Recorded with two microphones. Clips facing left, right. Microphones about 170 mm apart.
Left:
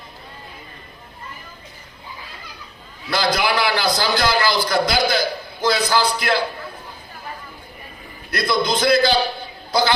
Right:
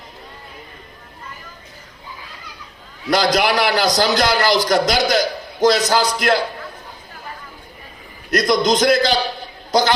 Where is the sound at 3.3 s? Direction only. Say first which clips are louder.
Right 3 dB; 40° right (ahead or behind).